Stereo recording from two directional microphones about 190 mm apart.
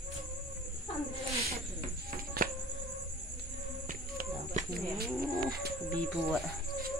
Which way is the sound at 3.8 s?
45° right (ahead or behind).